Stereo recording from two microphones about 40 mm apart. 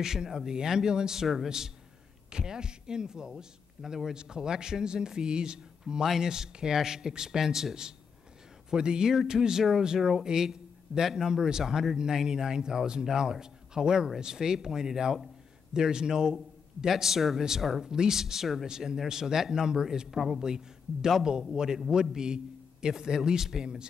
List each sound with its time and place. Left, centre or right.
0.0 s a man's voice: centre
21.2 s a man's voice: centre